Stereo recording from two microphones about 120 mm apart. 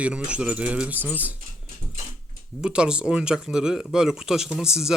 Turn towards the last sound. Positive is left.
turn(degrees=-5)  # may be behind; listen again after turning